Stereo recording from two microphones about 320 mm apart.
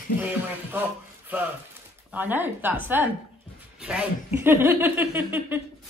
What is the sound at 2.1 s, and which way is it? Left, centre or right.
A woman's voice, centre.